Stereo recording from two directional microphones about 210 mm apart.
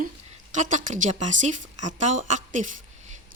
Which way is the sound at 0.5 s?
35° right (ahead or behind).